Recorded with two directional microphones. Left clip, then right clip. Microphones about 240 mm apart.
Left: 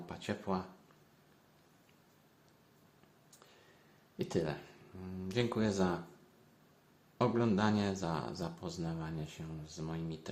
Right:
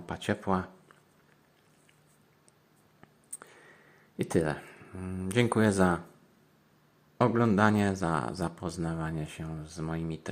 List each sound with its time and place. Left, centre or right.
0.0 s speech: right
3.4 s whispering: right
4.2 s speech: right
7.2 s speech: right